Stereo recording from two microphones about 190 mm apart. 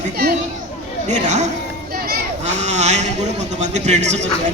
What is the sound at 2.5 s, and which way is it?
A man's voice, 35° right (ahead or behind).